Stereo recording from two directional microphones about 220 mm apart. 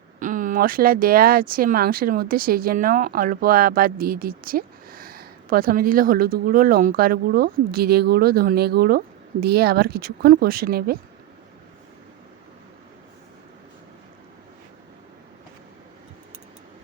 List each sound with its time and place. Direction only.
0.2 s speech: 35° right (ahead or behind)